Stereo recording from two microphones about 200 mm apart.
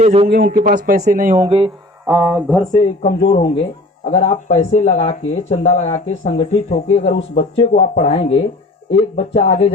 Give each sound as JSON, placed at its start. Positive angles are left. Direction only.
{"t": 0.0, "sound": "a man's voice", "side_deg": -30}
{"t": 0.3, "sound": "speech", "side_deg": -50}
{"t": 1.5, "sound": "speech", "side_deg": -30}
{"t": 2.0, "sound": "speech", "side_deg": -15}
{"t": 2.3, "sound": "speech", "side_deg": 0}
{"t": 3.0, "sound": "speech", "side_deg": 40}
{"t": 3.2, "sound": "speech", "side_deg": 25}